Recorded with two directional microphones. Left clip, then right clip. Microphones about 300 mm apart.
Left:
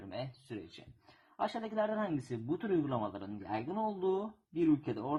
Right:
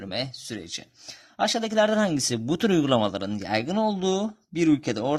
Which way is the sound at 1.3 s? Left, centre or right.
Right.